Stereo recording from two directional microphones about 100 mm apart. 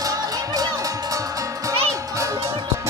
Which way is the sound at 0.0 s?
40° right (ahead or behind).